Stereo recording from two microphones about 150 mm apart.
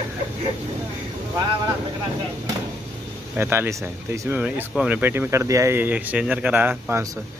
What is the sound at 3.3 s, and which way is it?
Speech, 15° right (ahead or behind).